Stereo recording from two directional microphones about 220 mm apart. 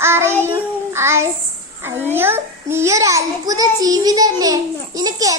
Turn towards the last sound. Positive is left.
turn(degrees=-15)  # may be behind; listen again after turning